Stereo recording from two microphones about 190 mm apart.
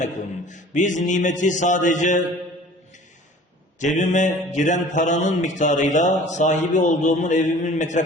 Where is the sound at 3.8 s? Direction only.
40° left (ahead or behind).